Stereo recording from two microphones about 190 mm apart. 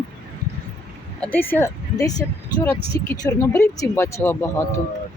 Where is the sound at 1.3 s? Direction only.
10° left (ahead or behind).